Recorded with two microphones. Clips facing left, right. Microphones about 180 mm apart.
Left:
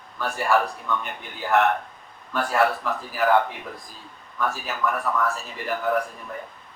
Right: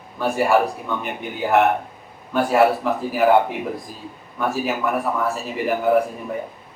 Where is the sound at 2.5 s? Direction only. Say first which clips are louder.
Right 6 dB; 25° right (ahead or behind).